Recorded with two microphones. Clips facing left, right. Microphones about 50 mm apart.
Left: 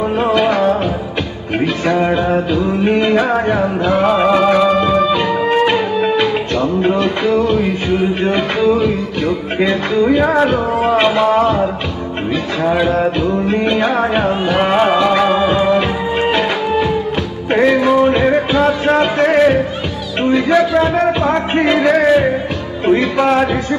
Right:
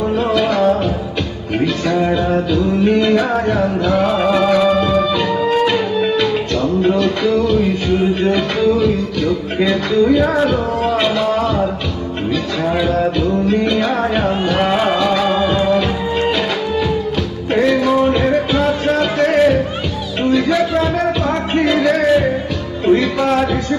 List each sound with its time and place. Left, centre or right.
0.0 s music: left
1.9 s music: left
12.7 s music: left
18.9 s a sound: left
20.2 s music: left
22.9 s speech: left